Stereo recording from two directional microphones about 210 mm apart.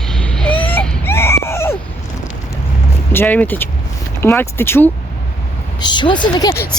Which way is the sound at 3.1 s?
10° left (ahead or behind).